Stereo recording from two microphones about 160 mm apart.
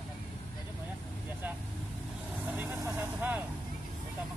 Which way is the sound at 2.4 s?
10° right (ahead or behind).